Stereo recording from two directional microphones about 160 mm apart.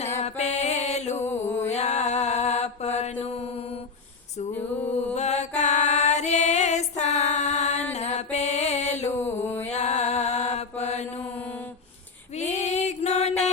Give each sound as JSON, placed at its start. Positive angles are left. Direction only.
{"t": 0.0, "sound": "mantra", "side_deg": 45}
{"t": 1.2, "sound": "mantra", "side_deg": 15}
{"t": 1.7, "sound": "mantra", "side_deg": 45}
{"t": 5.1, "sound": "music", "side_deg": 45}
{"t": 7.9, "sound": "mantra", "side_deg": 45}
{"t": 9.1, "sound": "mantra", "side_deg": 15}
{"t": 9.6, "sound": "mantra", "side_deg": 45}
{"t": 12.4, "sound": "music", "side_deg": 45}